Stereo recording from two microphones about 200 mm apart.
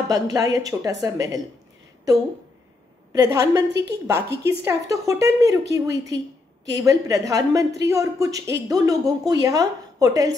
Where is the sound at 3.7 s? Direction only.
60° right (ahead or behind).